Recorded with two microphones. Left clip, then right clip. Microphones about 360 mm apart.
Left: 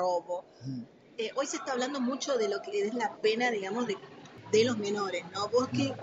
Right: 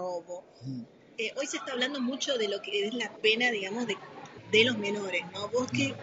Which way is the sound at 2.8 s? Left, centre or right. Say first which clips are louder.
Left 2 dB; left.